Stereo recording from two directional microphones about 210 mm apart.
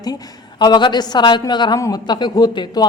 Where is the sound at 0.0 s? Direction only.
20° left (ahead or behind).